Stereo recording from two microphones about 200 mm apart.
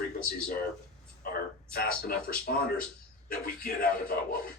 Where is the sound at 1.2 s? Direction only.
50° left (ahead or behind).